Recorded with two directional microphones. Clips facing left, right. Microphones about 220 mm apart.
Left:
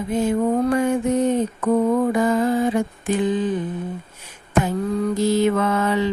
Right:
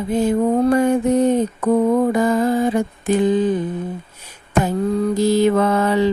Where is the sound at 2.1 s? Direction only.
40° right (ahead or behind).